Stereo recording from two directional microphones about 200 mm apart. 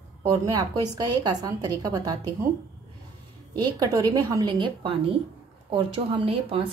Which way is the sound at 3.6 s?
20° right (ahead or behind).